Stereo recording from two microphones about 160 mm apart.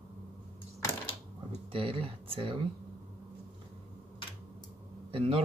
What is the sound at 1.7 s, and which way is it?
Speech, 35° right (ahead or behind).